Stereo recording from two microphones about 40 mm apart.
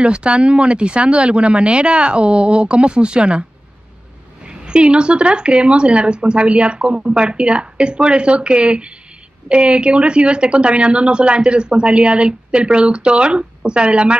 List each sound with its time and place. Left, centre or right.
0.0 s speech: right
4.5 s speech: right